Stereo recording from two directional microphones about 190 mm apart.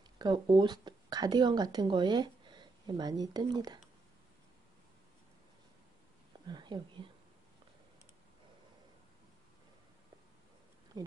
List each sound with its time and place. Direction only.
0.2 s speech: 25° right (ahead or behind)
6.4 s speech: 25° right (ahead or behind)
10.9 s speech: 20° right (ahead or behind)